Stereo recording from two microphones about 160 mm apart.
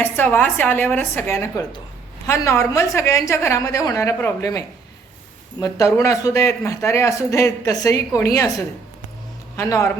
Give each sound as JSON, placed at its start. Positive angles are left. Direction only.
{"t": 0.0, "sound": "a woman's voice", "side_deg": 10}